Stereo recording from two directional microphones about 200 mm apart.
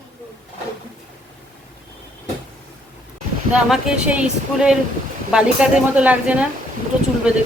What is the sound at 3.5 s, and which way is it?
Speech, 5° right (ahead or behind).